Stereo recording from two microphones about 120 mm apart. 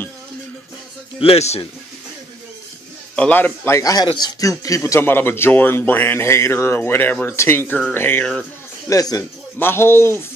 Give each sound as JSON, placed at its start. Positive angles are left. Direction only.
{"t": 1.2, "sound": "a man's voice", "side_deg": 60}
{"t": 3.2, "sound": "a man's voice", "side_deg": 15}
{"t": 7.9, "sound": "a sound", "side_deg": 20}
{"t": 8.8, "sound": "a man's voice", "side_deg": 30}
{"t": 9.6, "sound": "a man's voice", "side_deg": 20}